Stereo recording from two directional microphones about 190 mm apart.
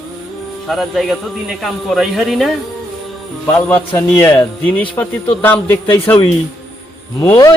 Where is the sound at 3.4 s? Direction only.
10° left (ahead or behind).